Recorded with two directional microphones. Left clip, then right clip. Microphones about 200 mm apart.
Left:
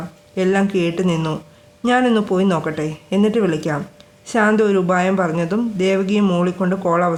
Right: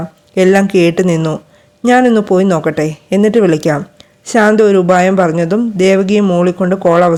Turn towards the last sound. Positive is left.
turn(degrees=-30)  # may be behind; listen again after turning